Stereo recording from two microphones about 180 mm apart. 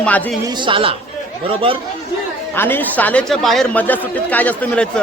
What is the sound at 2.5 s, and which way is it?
A man's voice, 10° left (ahead or behind).